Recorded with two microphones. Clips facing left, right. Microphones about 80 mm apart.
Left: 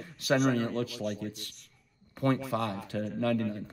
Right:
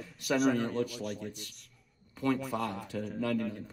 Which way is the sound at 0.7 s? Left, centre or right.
Left.